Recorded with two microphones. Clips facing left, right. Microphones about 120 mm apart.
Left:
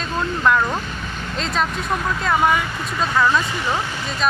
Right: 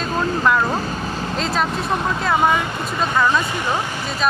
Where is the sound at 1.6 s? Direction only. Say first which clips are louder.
Right 2 dB; 30° right (ahead or behind).